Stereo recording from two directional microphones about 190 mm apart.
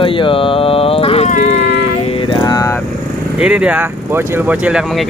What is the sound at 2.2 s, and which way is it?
Vehicle, 25° left (ahead or behind).